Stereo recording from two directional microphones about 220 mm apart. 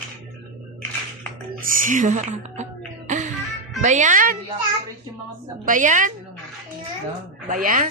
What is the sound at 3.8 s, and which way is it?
Speech, 35° right (ahead or behind).